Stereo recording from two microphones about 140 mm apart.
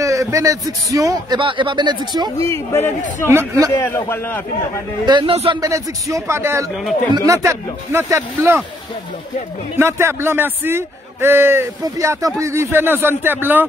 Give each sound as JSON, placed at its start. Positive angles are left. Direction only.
{"t": 0.0, "sound": "a man's voice", "side_deg": -20}
{"t": 2.3, "sound": "a man's voice", "side_deg": 20}
{"t": 3.3, "sound": "a man's voice", "side_deg": -20}
{"t": 3.7, "sound": "a man's voice", "side_deg": 20}
{"t": 5.0, "sound": "a man's voice", "side_deg": -35}
{"t": 5.3, "sound": "speech", "side_deg": -45}
{"t": 5.6, "sound": "a man's voice", "side_deg": -25}
{"t": 6.7, "sound": "speech", "side_deg": 0}
{"t": 7.2, "sound": "a man's voice", "side_deg": -20}
{"t": 9.8, "sound": "a man's voice", "side_deg": -15}